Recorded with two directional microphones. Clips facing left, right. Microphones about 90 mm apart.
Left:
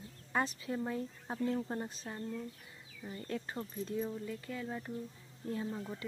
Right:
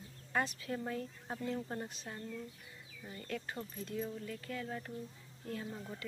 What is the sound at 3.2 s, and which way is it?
Speech, 25° left (ahead or behind).